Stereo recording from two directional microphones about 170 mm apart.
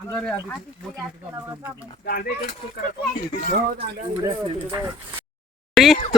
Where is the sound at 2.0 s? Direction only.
60° left (ahead or behind).